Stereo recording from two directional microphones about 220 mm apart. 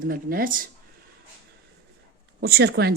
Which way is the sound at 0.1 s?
40° right (ahead or behind).